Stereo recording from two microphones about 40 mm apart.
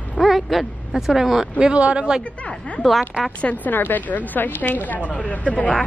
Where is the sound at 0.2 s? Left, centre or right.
Centre.